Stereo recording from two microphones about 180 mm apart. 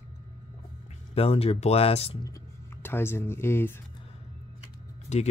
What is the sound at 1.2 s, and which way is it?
Speech, 35° left (ahead or behind).